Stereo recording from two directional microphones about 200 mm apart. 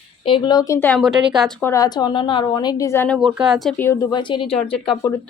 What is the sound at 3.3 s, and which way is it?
A woman's voice, 5° right (ahead or behind).